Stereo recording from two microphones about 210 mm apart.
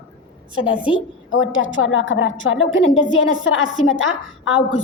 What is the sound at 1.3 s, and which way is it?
A woman's voice, 70° left (ahead or behind).